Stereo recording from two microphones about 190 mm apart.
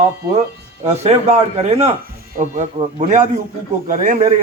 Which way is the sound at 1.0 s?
35° right (ahead or behind).